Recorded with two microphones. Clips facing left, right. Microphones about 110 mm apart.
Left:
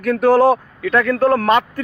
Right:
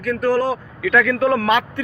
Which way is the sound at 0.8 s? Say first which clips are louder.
Left 1 dB; 30° left (ahead or behind).